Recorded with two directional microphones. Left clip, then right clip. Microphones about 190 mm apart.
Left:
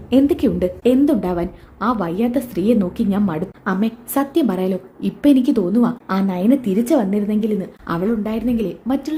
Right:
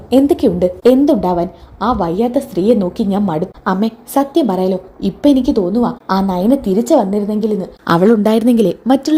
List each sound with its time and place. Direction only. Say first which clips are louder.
0.1 s a woman's voice: right 5 dB; 10° right (ahead or behind)
6.1 s a woman's voice: right 5 dB; 10° right (ahead or behind)
7.9 s a woman's voice: right 11 dB; 40° right (ahead or behind)